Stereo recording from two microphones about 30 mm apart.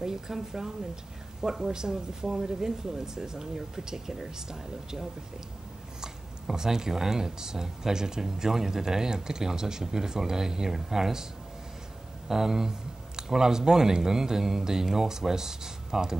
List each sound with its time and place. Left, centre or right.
0.0 s speech: centre
12.3 s speech: centre